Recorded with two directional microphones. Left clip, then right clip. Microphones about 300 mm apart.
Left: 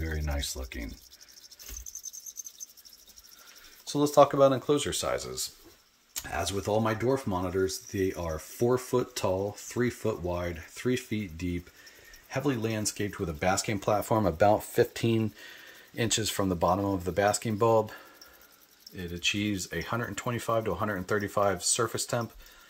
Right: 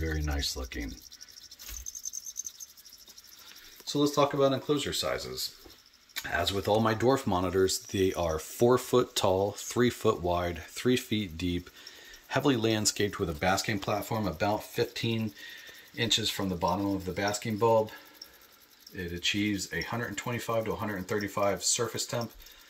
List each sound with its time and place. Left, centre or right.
3.8 s speech: centre
18.9 s speech: centre